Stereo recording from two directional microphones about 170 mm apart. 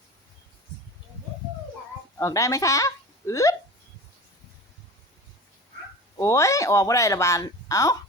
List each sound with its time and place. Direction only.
2.1 s speech: 20° left (ahead or behind)
6.1 s speech: 20° left (ahead or behind)